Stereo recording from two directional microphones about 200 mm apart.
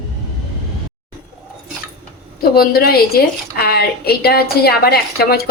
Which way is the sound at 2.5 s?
50° left (ahead or behind).